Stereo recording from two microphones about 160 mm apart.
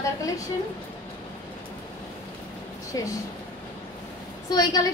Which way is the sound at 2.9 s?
20° left (ahead or behind).